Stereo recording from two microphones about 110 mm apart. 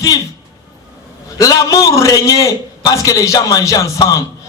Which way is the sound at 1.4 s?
35° left (ahead or behind).